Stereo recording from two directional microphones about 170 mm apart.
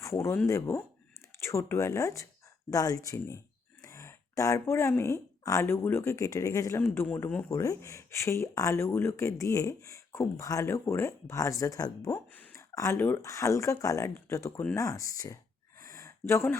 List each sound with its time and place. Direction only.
0.0 s speech: 15° left (ahead or behind)
15.8 s gasp: 20° left (ahead or behind)